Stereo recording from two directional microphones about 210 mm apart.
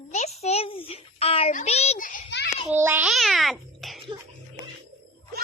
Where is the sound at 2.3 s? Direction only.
55° left (ahead or behind).